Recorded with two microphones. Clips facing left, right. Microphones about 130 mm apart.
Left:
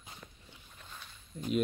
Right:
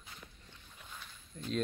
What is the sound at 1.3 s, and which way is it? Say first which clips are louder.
Speech: left 5 dB; 5° left (ahead or behind).